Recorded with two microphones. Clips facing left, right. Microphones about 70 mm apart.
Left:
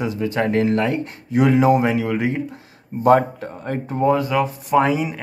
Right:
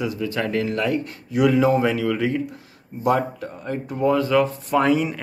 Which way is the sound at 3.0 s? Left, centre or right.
Left.